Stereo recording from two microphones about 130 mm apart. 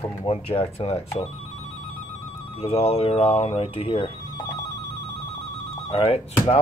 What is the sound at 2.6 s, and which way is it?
Speech, 50° left (ahead or behind).